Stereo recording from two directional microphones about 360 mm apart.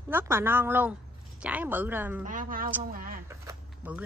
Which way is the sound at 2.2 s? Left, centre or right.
Right.